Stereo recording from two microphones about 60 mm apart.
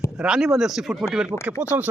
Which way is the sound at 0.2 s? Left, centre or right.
Centre.